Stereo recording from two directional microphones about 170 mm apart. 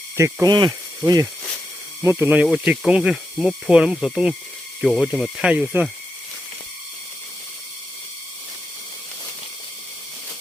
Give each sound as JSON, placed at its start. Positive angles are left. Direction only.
{"t": 0.4, "sound": "speech", "side_deg": -20}